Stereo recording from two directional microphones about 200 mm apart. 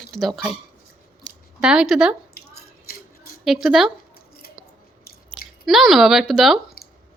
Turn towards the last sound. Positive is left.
turn(degrees=0)  # may be behind; listen again after turning